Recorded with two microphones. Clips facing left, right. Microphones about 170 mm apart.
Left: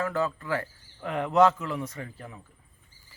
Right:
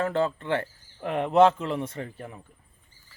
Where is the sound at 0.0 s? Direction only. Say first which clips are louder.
Right 3 dB; 25° right (ahead or behind).